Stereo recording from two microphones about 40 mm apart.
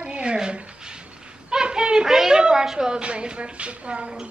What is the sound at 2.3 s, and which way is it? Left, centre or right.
Cat, right.